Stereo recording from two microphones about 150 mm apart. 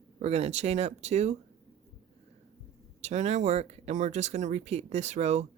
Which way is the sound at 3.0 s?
50° right (ahead or behind).